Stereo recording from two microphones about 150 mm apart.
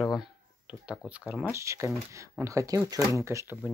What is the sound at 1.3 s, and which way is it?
Speech, 10° right (ahead or behind).